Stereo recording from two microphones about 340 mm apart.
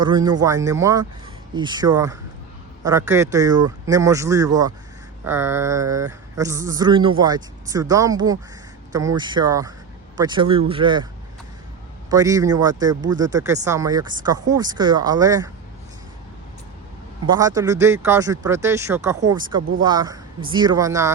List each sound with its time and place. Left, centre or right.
0.0 s speech: centre
12.1 s speech: centre
17.2 s speech: centre